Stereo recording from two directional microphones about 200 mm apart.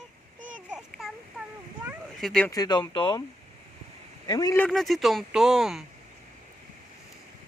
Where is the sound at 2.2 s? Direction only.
5° left (ahead or behind).